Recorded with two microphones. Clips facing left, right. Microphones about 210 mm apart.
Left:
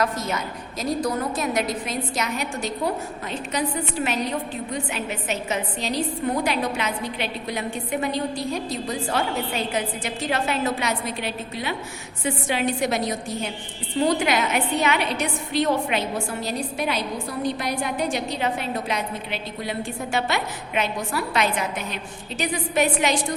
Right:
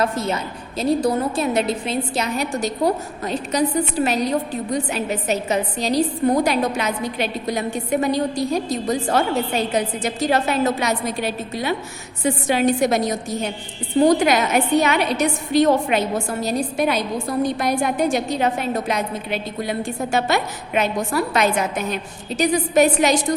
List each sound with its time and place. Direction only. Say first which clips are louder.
0.0 s a woman's voice: right 3 dB; 30° right (ahead or behind)